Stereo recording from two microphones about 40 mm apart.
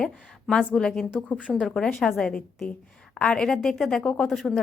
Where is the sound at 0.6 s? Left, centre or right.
Left.